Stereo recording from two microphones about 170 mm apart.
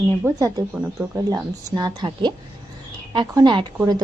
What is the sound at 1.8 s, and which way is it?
Speech, 25° right (ahead or behind).